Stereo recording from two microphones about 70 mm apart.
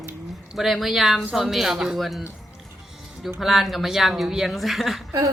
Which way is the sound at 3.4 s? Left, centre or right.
Centre.